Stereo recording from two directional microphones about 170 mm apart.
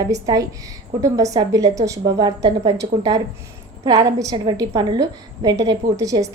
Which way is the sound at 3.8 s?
25° right (ahead or behind).